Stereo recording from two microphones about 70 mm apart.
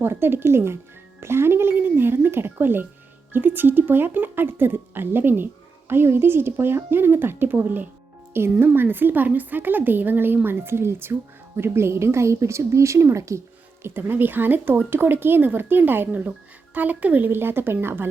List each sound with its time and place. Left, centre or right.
0.0 s speech: right
13.8 s speech: right